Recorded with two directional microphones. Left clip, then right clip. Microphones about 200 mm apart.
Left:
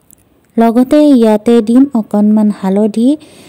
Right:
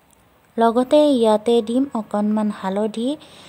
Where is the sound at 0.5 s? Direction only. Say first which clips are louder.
Left 6 dB; 30° left (ahead or behind).